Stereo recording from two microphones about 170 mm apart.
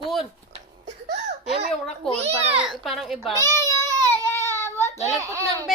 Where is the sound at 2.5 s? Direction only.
Centre (ahead or behind).